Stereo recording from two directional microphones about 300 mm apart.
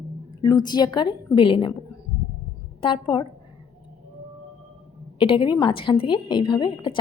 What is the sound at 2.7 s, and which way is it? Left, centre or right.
Speech, centre.